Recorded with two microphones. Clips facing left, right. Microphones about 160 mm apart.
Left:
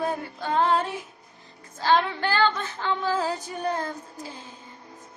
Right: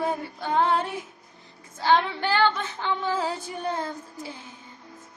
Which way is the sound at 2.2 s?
20° right (ahead or behind).